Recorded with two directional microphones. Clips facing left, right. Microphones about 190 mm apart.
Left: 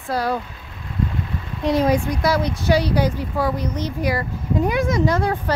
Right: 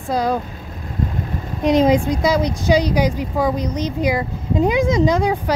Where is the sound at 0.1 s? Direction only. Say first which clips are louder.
Right 3 dB; 20° right (ahead or behind).